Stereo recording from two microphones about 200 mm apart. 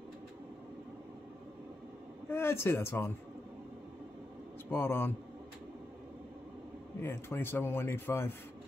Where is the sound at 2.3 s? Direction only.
10° left (ahead or behind).